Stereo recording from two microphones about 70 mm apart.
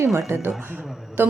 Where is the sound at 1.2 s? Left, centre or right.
Right.